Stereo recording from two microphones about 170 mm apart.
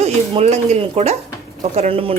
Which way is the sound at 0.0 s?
40° right (ahead or behind).